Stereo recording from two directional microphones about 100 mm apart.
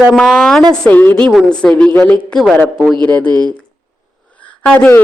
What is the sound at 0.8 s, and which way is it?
A woman's voice, 15° left (ahead or behind).